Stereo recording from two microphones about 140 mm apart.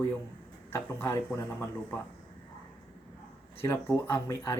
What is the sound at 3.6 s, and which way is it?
Speech, 20° left (ahead or behind).